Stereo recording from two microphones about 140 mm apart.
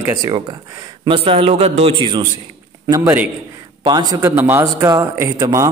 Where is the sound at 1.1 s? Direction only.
45° right (ahead or behind).